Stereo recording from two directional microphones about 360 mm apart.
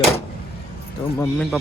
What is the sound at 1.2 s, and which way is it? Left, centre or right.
Speech, centre.